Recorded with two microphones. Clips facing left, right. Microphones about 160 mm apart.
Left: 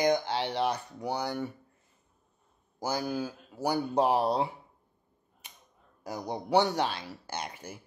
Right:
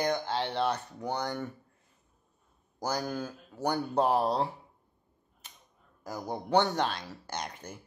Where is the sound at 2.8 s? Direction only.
5° left (ahead or behind).